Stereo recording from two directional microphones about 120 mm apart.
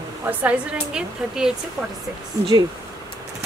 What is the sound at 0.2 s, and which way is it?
A woman's voice, 10° right (ahead or behind).